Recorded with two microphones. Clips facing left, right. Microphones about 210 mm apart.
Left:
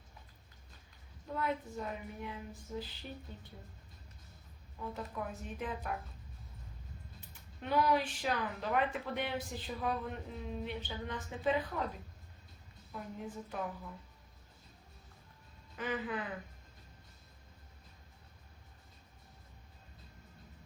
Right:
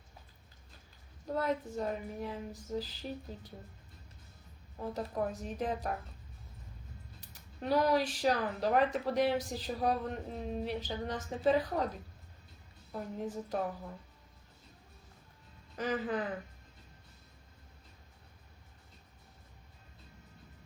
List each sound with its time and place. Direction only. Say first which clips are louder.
1.3 s speech: right 4 dB; 40° right (ahead or behind)
4.8 s speech: right 6 dB; 40° right (ahead or behind)
7.2 s speech: right 6 dB; 40° right (ahead or behind)
12.9 s speech: right 5 dB; 40° right (ahead or behind)
15.7 s speech: right 4 dB; 40° right (ahead or behind)